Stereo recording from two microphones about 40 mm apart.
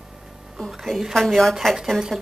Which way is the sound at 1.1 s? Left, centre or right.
Centre.